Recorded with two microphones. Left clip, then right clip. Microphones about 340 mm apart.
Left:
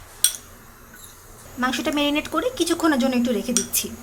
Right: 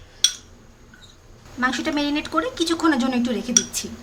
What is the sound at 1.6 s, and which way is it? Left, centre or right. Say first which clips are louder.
Speech: even; centre.